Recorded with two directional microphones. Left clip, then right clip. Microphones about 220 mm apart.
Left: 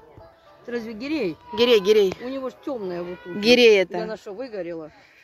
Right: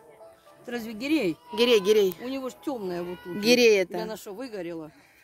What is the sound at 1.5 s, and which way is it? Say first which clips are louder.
Speech: left 4 dB; centre (ahead or behind).